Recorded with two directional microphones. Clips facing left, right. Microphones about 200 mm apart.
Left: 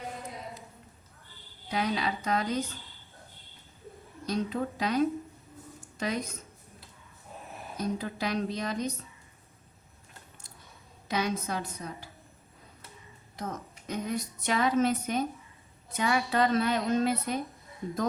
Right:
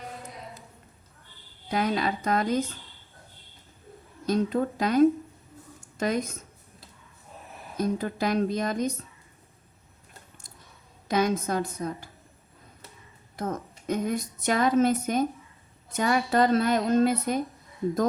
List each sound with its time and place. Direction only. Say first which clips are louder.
1.7 s a woman's voice: right 4 dB; 50° right (ahead or behind)
4.3 s a woman's voice: right 6 dB; 50° right (ahead or behind)
7.8 s a woman's voice: right 5 dB; 50° right (ahead or behind)
11.1 s a woman's voice: right 6 dB; 50° right (ahead or behind)
13.3 s a woman's voice: right 6 dB; 50° right (ahead or behind)